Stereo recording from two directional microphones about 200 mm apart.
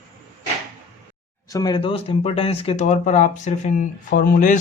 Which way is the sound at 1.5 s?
20° left (ahead or behind).